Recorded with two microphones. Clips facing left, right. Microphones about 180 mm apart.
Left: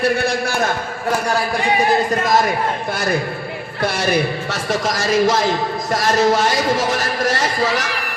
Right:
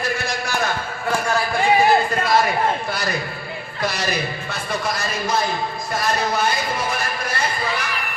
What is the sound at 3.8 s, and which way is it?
A man's voice, 55° left (ahead or behind).